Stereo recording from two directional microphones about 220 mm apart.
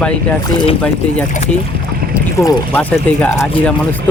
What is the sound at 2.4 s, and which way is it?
Speech, 10° left (ahead or behind).